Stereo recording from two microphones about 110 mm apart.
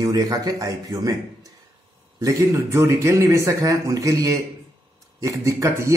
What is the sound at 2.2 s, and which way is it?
A man's voice, 25° right (ahead or behind).